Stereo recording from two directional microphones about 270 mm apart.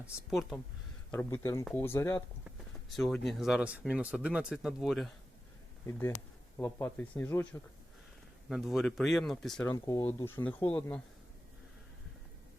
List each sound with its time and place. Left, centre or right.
0.0 s speech: centre
5.8 s speech: centre
8.4 s speech: centre
9.7 s speech: centre